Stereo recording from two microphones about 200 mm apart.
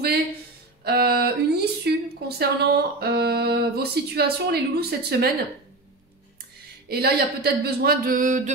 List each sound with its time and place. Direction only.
0.8 s a woman's voice: 50° right (ahead or behind)
6.9 s speech: 50° right (ahead or behind)